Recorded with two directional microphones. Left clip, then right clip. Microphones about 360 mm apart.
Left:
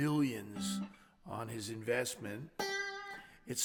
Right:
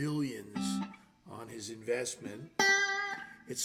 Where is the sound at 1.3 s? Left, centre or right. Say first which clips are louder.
Left 2 dB; left.